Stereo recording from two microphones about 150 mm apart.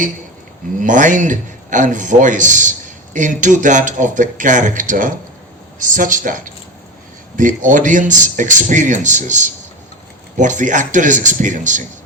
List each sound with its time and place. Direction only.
0.8 s a man's voice: 60° right (ahead or behind)